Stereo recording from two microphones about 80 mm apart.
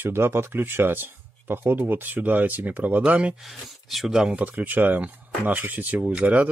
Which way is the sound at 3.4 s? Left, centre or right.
Centre.